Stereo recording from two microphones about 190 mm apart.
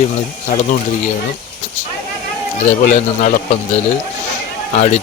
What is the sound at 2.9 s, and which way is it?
Speech, 40° left (ahead or behind).